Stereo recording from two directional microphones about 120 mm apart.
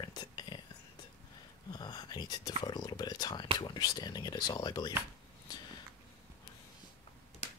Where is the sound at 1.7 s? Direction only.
35° left (ahead or behind).